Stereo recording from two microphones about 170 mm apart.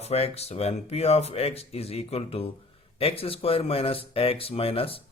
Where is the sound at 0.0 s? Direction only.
35° left (ahead or behind).